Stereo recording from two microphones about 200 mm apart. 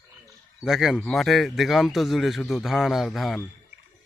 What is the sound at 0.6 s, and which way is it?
Speech, centre (ahead or behind).